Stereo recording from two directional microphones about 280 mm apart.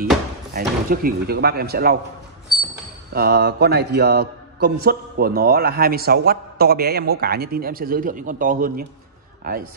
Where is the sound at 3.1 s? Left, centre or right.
Right.